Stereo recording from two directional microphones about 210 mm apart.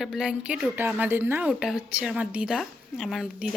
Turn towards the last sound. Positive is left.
turn(degrees=0)  # may be behind; listen again after turning